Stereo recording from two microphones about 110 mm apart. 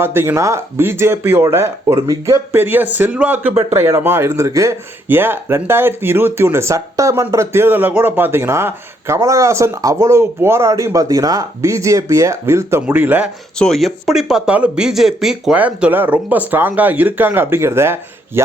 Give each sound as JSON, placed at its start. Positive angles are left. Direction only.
{"t": 0.0, "sound": "speech", "side_deg": -20}
{"t": 2.5, "sound": "speech", "side_deg": -20}
{"t": 13.6, "sound": "speech", "side_deg": 5}